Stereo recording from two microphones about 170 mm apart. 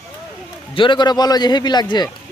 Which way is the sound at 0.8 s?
25° left (ahead or behind).